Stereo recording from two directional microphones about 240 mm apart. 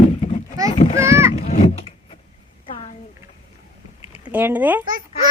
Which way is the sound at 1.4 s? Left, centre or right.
Left.